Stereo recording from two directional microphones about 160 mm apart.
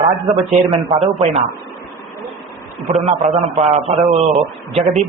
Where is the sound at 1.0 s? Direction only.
40° right (ahead or behind).